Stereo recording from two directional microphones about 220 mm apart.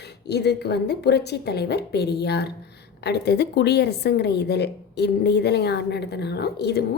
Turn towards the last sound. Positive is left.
turn(degrees=50)  # may be behind; listen again after turning